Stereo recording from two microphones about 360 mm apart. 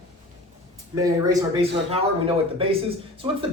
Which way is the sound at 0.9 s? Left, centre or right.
Centre.